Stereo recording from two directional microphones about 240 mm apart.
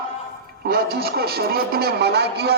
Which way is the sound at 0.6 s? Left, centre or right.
Right.